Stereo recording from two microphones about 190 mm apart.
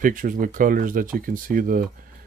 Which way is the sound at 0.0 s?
45° right (ahead or behind).